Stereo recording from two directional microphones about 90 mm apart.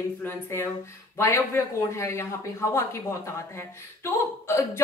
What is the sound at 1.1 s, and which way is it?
A woman's voice, 30° left (ahead or behind).